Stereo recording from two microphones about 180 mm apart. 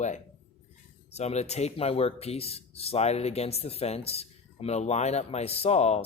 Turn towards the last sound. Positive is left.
turn(degrees=35)  # may be behind; listen again after turning